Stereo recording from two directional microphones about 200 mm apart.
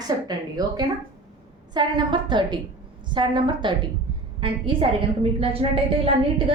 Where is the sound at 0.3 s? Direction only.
20° right (ahead or behind).